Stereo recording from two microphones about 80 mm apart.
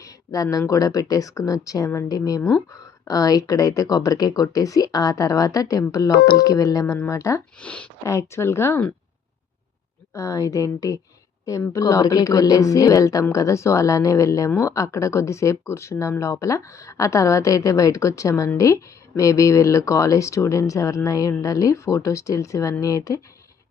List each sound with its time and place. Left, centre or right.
0.0 s a sound: left
0.7 s speech: left
7.6 s speech: centre
8.0 s speech: left
10.2 s speech: left